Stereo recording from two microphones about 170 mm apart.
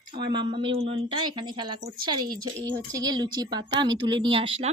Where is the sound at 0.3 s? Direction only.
25° right (ahead or behind).